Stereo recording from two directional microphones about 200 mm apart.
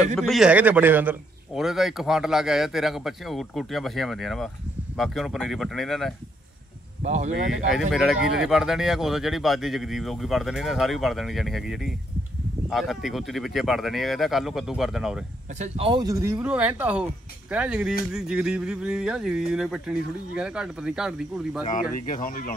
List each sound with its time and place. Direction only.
0.1 s a man's voice: centre (ahead or behind)
7.0 s speech: 35° right (ahead or behind)
7.7 s a man's voice: centre (ahead or behind)
15.6 s a man's voice: 30° right (ahead or behind); by 21.6 s 5° right (ahead or behind)
21.6 s speech: 40° left (ahead or behind)